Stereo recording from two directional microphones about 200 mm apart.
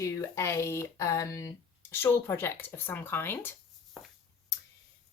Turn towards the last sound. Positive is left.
turn(degrees=0)  # may be behind; listen again after turning